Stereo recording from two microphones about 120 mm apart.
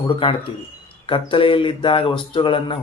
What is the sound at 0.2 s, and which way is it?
Speech, 50° left (ahead or behind).